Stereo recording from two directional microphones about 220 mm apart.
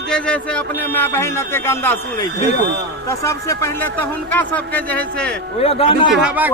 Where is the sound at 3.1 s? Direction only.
10° left (ahead or behind).